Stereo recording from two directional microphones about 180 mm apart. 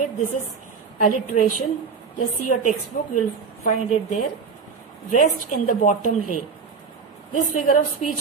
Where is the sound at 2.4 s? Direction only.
45° left (ahead or behind).